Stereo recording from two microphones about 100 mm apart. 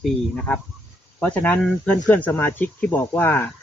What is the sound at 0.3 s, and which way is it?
Speech, 5° left (ahead or behind).